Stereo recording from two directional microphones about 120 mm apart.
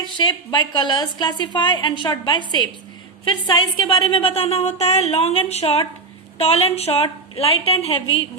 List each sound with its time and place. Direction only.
0.2 s a woman's voice: 40° left (ahead or behind); by 8.3 s 55° left (ahead or behind)